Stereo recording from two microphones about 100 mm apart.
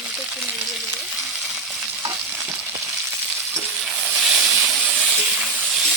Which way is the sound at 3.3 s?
Centre (ahead or behind).